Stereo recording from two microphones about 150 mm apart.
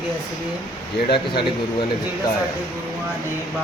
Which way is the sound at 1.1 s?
35° left (ahead or behind).